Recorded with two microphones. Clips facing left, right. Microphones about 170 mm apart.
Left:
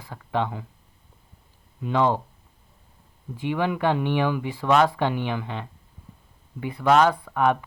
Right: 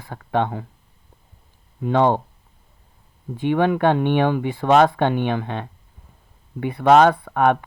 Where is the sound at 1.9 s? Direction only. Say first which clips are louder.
Right 4 dB; 60° right (ahead or behind).